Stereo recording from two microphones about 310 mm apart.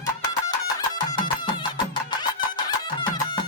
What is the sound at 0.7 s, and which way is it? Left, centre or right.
Music, centre.